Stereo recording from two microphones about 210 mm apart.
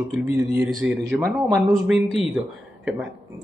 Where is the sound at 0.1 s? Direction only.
Centre (ahead or behind).